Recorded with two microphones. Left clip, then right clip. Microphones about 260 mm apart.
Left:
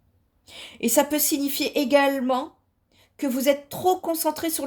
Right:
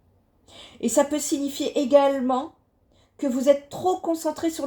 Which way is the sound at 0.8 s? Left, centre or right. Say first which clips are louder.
Even; left.